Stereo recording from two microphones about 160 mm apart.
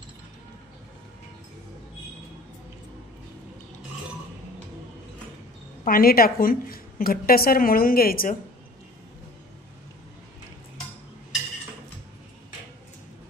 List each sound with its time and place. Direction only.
5.9 s a woman's voice: 65° left (ahead or behind)